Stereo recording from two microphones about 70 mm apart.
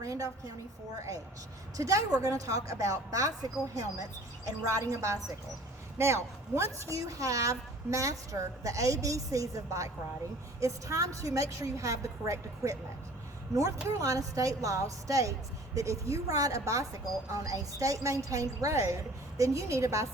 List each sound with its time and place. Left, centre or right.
0.0 s a woman's voice: right
1.7 s a woman's voice: right